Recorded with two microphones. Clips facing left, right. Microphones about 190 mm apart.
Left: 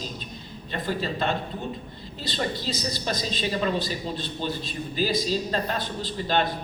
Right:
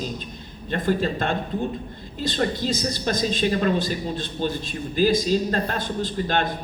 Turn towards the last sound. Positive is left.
turn(degrees=-50)  # may be behind; listen again after turning